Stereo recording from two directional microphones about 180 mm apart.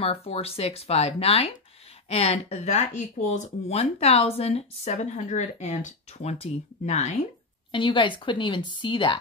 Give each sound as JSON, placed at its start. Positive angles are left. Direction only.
{"t": 0.0, "sound": "a woman's voice", "side_deg": 35}